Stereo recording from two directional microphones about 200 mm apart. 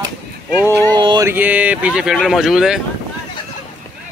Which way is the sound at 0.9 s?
20° right (ahead or behind).